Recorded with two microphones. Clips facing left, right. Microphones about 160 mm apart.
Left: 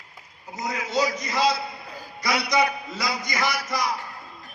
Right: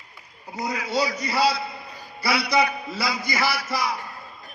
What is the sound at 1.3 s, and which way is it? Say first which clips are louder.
A man's voice: right 1 dB; 10° right (ahead or behind).